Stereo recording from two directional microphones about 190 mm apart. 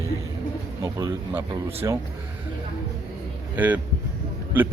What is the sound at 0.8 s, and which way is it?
Speech, 20° right (ahead or behind).